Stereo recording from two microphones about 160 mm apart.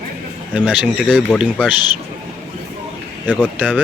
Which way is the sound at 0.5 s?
10° right (ahead or behind).